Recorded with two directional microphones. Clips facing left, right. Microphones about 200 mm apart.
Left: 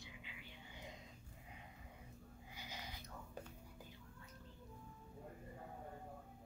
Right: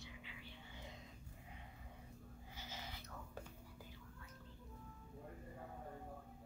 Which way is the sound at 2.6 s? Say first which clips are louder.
Even; 15° left (ahead or behind).